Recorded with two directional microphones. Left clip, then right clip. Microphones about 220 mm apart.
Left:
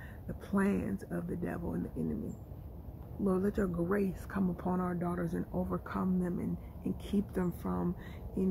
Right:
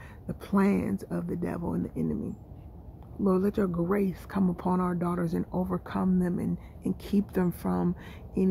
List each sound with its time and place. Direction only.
0.3 s speech: 45° right (ahead or behind)
3.3 s speech: 45° right (ahead or behind)